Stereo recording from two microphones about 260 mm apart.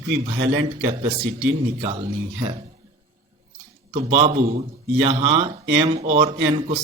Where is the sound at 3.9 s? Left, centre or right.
Right.